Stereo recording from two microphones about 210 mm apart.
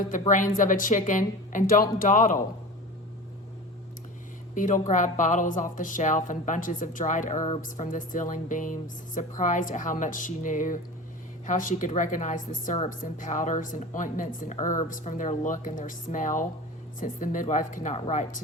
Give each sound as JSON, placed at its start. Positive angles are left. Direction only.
{"t": 0.0, "sound": "a woman's voice", "side_deg": 40}
{"t": 4.5, "sound": "a woman's voice", "side_deg": 40}